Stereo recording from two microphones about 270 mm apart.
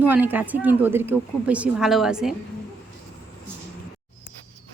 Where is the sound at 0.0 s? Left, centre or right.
Centre.